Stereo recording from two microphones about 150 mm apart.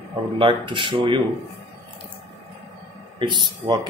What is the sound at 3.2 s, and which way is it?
Speech, 30° right (ahead or behind).